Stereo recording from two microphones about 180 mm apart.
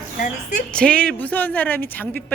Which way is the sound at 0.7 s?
5° left (ahead or behind).